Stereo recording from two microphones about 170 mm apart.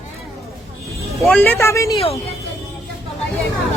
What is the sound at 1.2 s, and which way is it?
Speech, 5° left (ahead or behind).